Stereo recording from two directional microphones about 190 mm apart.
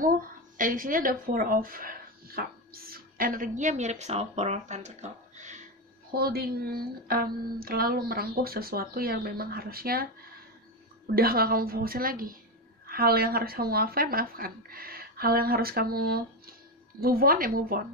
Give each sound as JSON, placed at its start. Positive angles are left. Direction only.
{"t": 0.0, "sound": "speech", "side_deg": -45}
{"t": 6.1, "sound": "a woman's voice", "side_deg": -55}
{"t": 11.1, "sound": "a woman's voice", "side_deg": -50}